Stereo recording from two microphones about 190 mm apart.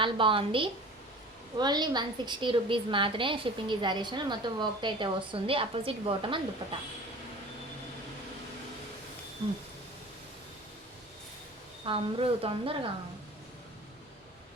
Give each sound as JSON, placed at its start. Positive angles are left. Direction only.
{"t": 0.0, "sound": "a woman's voice", "side_deg": -25}
{"t": 11.9, "sound": "a woman's voice", "side_deg": -30}